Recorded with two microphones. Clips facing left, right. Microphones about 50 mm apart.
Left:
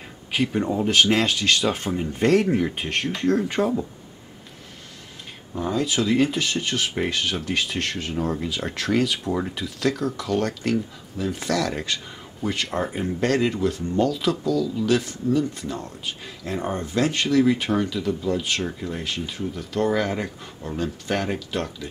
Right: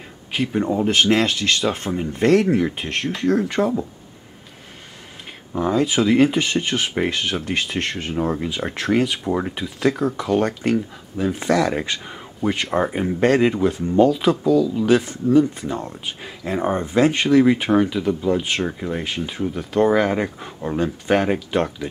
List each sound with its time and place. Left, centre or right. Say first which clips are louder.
0.3 s speech: right 2 dB; centre
5.5 s speech: right 5 dB; centre
12.4 s speech: right 5 dB; centre
12.7 s speech: right 5 dB; centre